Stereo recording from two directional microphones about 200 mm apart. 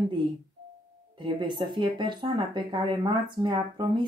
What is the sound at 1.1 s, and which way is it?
Speech, 25° right (ahead or behind).